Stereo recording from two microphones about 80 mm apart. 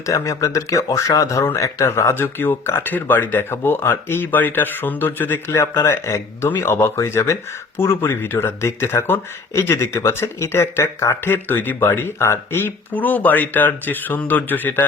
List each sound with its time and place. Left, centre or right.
0.0 s speech: left
5.5 s speech: left